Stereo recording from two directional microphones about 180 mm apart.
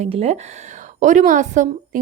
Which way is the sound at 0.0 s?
35° right (ahead or behind).